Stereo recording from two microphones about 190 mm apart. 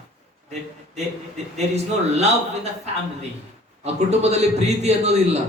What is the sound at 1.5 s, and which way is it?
Speech, 35° right (ahead or behind).